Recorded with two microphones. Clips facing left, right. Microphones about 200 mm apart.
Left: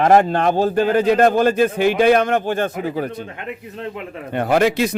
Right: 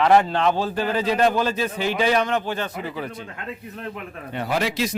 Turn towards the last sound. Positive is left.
turn(degrees=55)  # may be behind; listen again after turning